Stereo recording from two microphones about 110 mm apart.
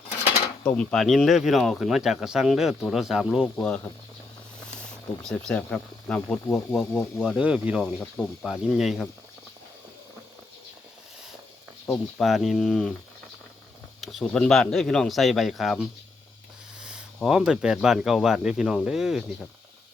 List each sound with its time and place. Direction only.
0.8 s speech: 5° left (ahead or behind)
3.4 s speech: 5° left (ahead or behind)
4.8 s speech: 5° left (ahead or behind)
6.5 s speech: 25° left (ahead or behind)
7.2 s speech: 5° right (ahead or behind)
7.8 s speech: 5° left (ahead or behind)
12.1 s speech: centre (ahead or behind)
14.0 s speech: centre (ahead or behind)
17.2 s speech: 5° right (ahead or behind)